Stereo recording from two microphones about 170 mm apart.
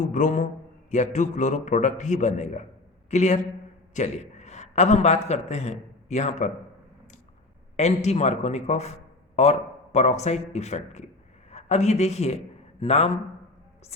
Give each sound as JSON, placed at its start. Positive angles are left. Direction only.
{"t": 0.0, "sound": "a man's voice", "side_deg": 50}
{"t": 7.8, "sound": "a man's voice", "side_deg": 40}